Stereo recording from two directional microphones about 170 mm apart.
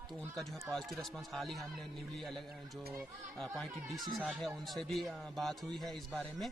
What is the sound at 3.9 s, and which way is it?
Speech, 25° right (ahead or behind).